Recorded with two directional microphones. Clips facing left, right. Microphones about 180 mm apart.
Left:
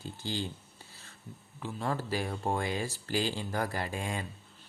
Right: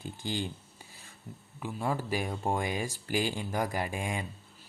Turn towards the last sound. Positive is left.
turn(degrees=-15)  # may be behind; listen again after turning